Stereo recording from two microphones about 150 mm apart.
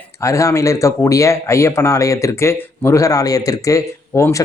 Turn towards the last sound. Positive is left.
turn(degrees=20)  # may be behind; listen again after turning